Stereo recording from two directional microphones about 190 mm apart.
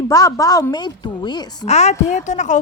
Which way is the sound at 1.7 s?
35° left (ahead or behind).